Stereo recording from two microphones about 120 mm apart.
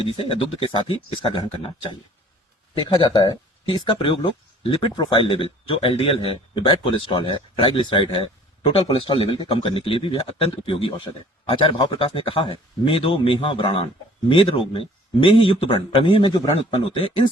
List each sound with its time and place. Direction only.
0.0 s speech: 50° left (ahead or behind)
3.0 s speech: 45° left (ahead or behind)